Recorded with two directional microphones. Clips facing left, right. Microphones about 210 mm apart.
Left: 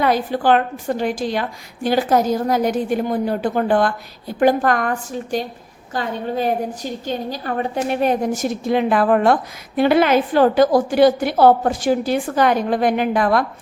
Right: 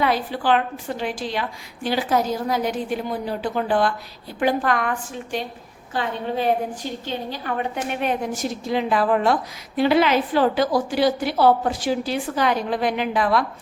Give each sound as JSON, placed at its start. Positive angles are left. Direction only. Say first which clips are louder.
{"t": 0.0, "sound": "a woman's voice", "louder": "left 4 dB", "side_deg": 45}